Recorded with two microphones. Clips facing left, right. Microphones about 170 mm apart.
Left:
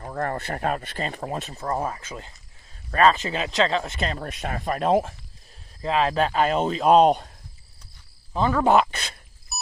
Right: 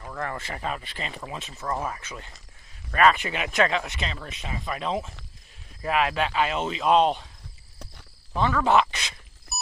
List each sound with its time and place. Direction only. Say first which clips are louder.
0.0 s speech: left 5 dB; 40° left (ahead or behind)
1.5 s speech: even; 35° left (ahead or behind)
3.9 s speech: left 5 dB; 45° left (ahead or behind)
5.8 s speech: left 3 dB; 30° left (ahead or behind)
8.4 s a sound: left 2 dB; 35° left (ahead or behind)
9.5 s a sound: even; centre (ahead or behind)